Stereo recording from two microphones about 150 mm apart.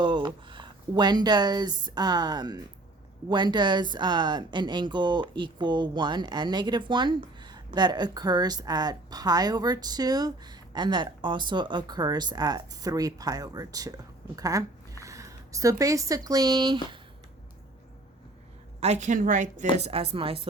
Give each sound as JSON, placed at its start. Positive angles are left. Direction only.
{"t": 0.0, "sound": "a woman's voice", "side_deg": -30}
{"t": 18.8, "sound": "a woman's voice", "side_deg": -50}
{"t": 19.8, "sound": "speech", "side_deg": -40}